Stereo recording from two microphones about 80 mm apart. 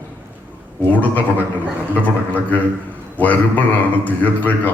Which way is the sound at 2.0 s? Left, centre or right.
Left.